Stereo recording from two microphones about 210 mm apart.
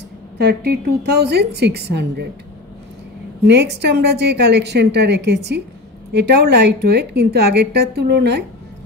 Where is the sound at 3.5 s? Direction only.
55° right (ahead or behind).